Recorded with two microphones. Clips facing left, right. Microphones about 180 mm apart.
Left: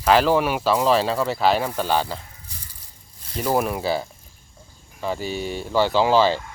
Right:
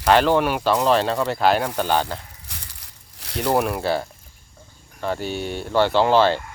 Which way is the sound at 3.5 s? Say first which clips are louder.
Right 1 dB; centre (ahead or behind).